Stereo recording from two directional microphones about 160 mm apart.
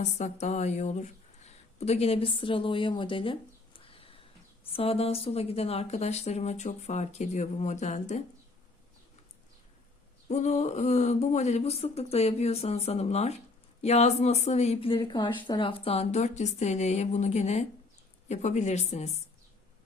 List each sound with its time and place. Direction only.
0.0 s speech: 45° left (ahead or behind)
10.2 s speech: 45° left (ahead or behind)